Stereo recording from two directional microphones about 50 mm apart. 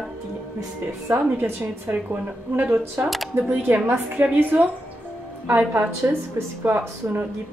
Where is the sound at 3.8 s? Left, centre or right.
Right.